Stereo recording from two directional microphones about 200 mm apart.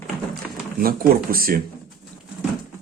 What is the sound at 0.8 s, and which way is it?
Speech, 45° right (ahead or behind).